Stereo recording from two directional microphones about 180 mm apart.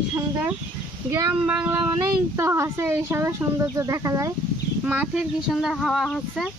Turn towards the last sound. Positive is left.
turn(degrees=0)  # may be behind; listen again after turning